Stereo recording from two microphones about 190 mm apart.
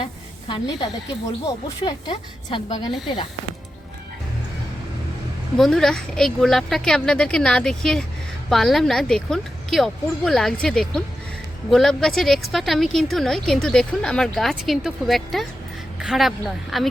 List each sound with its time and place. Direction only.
0.0 s a sound: 25° left (ahead or behind)
1.8 s a woman's voice: 25° left (ahead or behind)
5.5 s a woman's voice: centre (ahead or behind)